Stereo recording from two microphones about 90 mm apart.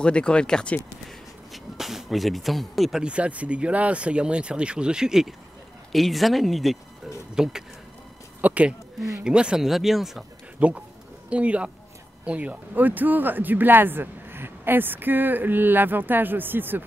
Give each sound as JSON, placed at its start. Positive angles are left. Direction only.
{"t": 0.0, "sound": "speech", "side_deg": 10}
{"t": 1.0, "sound": "a sound", "side_deg": 0}
{"t": 3.0, "sound": "speech", "side_deg": -15}
{"t": 8.4, "sound": "speech", "side_deg": -15}
{"t": 9.0, "sound": "speech", "side_deg": -5}
{"t": 10.6, "sound": "speech", "side_deg": -15}